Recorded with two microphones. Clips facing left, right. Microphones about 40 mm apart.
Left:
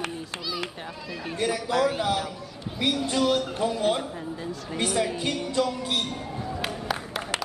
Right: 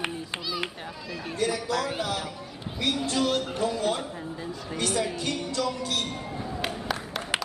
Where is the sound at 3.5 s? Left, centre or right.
Centre.